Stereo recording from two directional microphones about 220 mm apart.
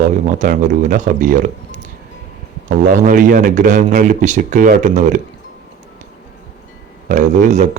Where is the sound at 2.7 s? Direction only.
40° right (ahead or behind).